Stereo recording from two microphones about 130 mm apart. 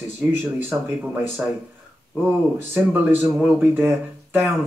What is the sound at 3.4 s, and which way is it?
Speech, centre (ahead or behind).